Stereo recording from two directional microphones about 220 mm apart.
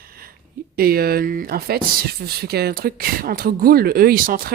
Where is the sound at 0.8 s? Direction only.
45° right (ahead or behind).